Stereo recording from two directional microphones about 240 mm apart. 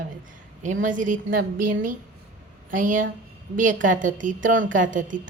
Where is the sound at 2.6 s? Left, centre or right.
Right.